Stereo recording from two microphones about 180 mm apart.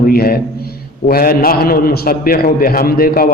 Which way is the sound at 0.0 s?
55° left (ahead or behind).